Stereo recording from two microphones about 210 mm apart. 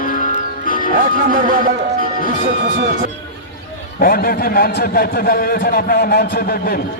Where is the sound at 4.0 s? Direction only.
45° left (ahead or behind).